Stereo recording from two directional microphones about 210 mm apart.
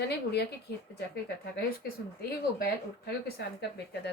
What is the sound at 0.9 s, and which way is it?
Speech, 50° left (ahead or behind).